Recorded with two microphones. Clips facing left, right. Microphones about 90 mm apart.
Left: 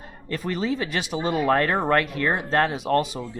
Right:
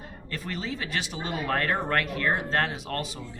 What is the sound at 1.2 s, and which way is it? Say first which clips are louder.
Speech: left 8 dB; 30° left (ahead or behind).